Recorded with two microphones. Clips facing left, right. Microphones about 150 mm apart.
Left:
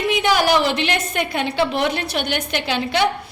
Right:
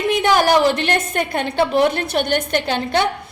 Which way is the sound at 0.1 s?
50° right (ahead or behind).